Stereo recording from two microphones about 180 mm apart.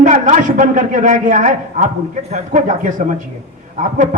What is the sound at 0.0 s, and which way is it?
A man's voice, 40° right (ahead or behind).